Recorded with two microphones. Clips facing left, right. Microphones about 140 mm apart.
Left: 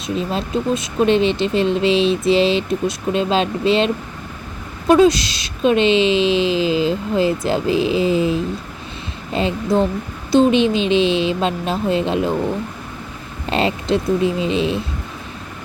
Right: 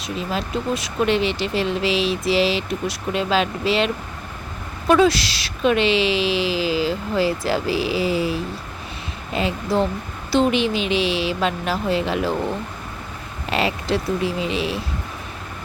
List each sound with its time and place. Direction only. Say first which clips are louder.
0.3 s speech: left 2 dB; 25° left (ahead or behind)
13.5 s speech: left 3 dB; 25° left (ahead or behind)